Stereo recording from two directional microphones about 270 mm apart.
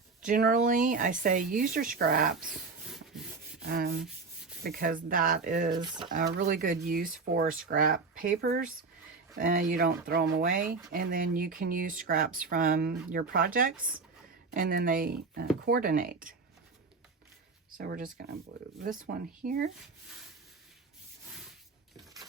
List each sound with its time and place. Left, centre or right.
0.2 s speech: right
3.6 s rub: right
4.6 s speech: right
10.6 s speech: centre
10.9 s speech: right
17.7 s speech: right
19.4 s speech: right